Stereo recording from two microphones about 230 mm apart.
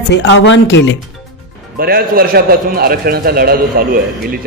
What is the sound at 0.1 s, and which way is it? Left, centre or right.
Speech, left.